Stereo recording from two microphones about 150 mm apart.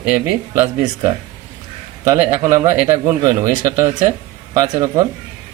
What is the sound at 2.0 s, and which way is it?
Speech, 20° right (ahead or behind).